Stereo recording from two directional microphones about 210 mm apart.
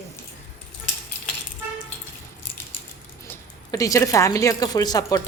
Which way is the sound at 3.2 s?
15° left (ahead or behind).